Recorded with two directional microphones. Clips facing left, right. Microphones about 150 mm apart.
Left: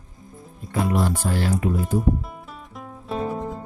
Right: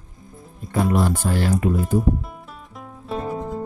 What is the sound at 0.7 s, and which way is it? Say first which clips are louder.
Speech: right 2 dB; 50° right (ahead or behind).